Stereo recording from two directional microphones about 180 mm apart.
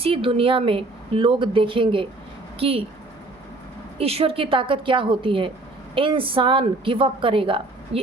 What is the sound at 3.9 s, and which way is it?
A woman's voice, 35° right (ahead or behind).